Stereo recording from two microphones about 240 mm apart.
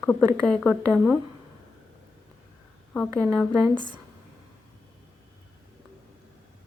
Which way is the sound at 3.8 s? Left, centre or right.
Centre.